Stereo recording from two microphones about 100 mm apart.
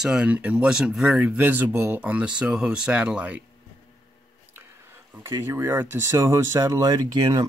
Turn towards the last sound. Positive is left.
turn(degrees=-45)  # may be behind; listen again after turning